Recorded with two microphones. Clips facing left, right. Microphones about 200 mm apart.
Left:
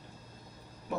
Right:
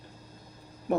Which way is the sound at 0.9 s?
55° right (ahead or behind).